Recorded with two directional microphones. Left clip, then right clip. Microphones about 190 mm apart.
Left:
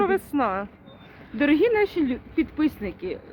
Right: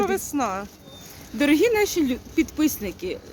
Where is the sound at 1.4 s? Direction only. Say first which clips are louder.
Right 1 dB; 20° right (ahead or behind).